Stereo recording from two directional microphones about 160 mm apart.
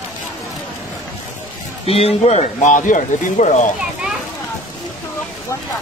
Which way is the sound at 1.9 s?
40° left (ahead or behind).